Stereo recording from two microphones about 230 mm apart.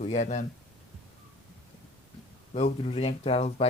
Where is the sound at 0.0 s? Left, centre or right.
Left.